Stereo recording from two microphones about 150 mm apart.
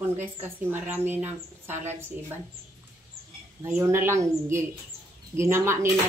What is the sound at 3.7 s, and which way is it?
A woman's voice, 20° right (ahead or behind).